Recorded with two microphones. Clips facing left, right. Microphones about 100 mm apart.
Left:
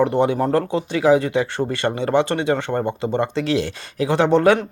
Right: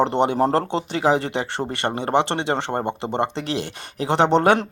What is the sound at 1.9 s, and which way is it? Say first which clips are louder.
Speech: even; 50° right (ahead or behind).